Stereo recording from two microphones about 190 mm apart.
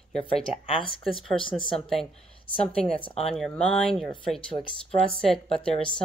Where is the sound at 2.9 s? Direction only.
30° left (ahead or behind).